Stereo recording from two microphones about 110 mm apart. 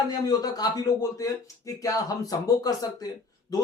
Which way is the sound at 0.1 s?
35° left (ahead or behind).